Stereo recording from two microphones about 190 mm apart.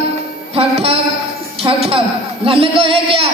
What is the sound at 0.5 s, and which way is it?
Music, 30° right (ahead or behind).